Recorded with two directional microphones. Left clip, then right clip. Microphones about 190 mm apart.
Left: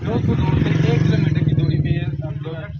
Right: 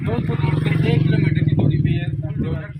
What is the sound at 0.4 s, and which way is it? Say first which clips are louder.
Vehicle: left 2 dB; 45° left (ahead or behind).